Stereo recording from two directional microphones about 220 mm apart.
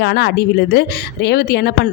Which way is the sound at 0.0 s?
50° left (ahead or behind).